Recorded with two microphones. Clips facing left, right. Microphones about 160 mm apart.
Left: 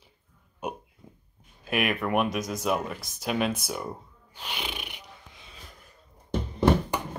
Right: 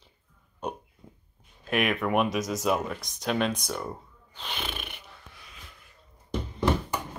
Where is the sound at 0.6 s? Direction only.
10° left (ahead or behind).